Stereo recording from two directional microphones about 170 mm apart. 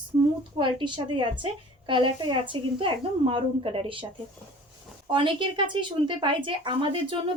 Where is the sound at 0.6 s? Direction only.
30° right (ahead or behind).